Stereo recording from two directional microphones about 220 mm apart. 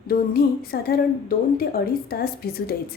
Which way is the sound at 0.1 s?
45° left (ahead or behind).